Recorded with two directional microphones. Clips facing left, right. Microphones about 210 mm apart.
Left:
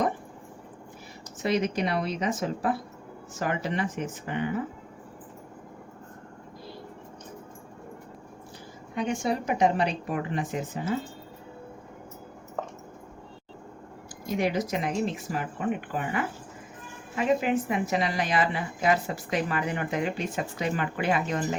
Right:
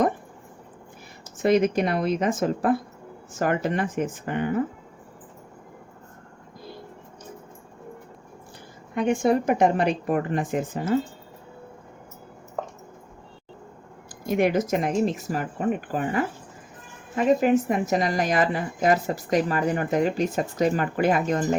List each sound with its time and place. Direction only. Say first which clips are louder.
1.4 s a woman's voice: right 6 dB; 50° right (ahead or behind)
9.0 s a woman's voice: right 7 dB; 50° right (ahead or behind)
14.3 s a woman's voice: right 5 dB; 55° right (ahead or behind)